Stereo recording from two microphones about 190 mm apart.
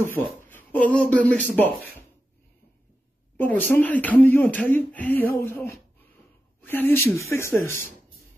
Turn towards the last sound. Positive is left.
turn(degrees=15)  # may be behind; listen again after turning